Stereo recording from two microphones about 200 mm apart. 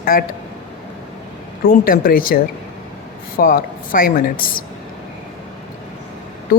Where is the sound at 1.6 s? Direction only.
45° left (ahead or behind).